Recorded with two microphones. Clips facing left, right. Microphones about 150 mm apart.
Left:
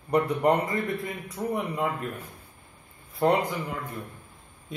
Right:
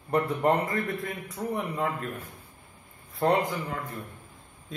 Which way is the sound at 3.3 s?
Centre (ahead or behind).